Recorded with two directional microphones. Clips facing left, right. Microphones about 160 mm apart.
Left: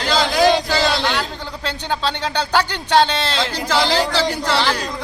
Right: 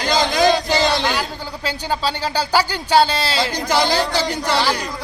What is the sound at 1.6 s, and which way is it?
A man's voice, 5° right (ahead or behind).